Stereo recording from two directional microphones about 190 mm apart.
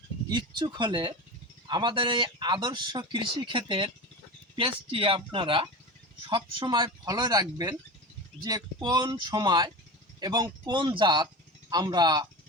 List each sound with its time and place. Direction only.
0.3 s speech: 25° right (ahead or behind)